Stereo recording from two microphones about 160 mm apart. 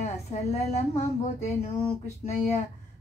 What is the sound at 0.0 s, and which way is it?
A woman's voice, 45° left (ahead or behind).